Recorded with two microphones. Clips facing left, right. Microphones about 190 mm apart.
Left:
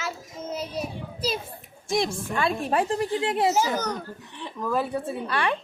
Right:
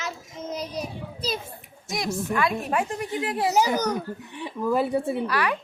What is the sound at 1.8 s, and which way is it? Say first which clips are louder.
Speech: left 2 dB; 30° left (ahead or behind).